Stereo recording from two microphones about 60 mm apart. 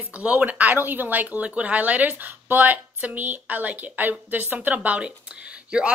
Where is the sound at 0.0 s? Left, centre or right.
Right.